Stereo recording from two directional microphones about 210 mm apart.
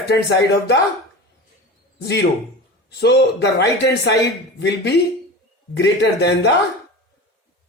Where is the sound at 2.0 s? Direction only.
50° left (ahead or behind).